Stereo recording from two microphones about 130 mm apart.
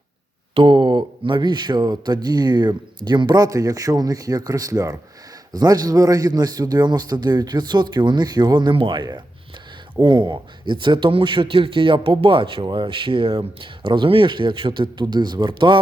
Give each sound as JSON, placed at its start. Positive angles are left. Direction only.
{"t": 0.5, "sound": "speech", "side_deg": -40}